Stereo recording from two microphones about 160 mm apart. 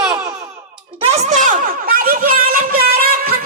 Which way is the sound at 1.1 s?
50° right (ahead or behind).